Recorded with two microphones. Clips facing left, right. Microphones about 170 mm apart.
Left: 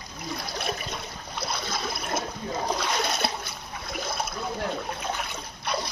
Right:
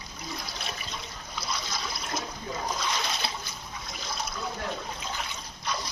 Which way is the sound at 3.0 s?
60° left (ahead or behind).